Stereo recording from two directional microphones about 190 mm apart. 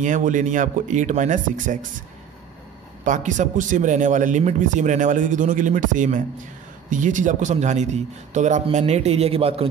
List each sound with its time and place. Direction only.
0.0 s a man's voice: 40° right (ahead or behind)